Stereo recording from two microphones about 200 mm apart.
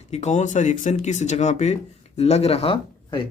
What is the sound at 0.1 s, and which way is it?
Speech, 35° left (ahead or behind).